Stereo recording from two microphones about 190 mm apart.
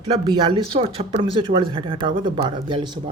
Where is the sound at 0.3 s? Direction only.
25° right (ahead or behind).